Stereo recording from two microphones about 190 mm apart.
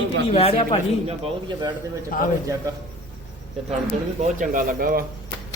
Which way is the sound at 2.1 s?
45° left (ahead or behind).